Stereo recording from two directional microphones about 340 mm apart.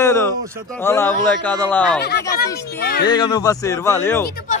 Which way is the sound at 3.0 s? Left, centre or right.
Centre.